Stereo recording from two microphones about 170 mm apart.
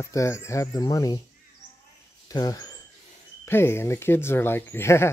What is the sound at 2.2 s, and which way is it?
Speech, 20° left (ahead or behind).